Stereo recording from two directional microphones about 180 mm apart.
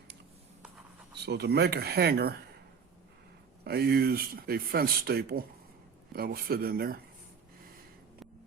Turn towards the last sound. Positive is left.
turn(degrees=-55)  # may be behind; listen again after turning